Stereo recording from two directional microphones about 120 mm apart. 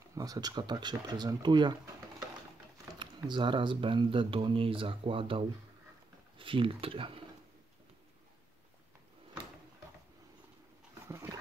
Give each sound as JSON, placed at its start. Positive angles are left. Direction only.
{"t": 0.1, "sound": "speech", "side_deg": -30}
{"t": 11.1, "sound": "dog", "side_deg": -25}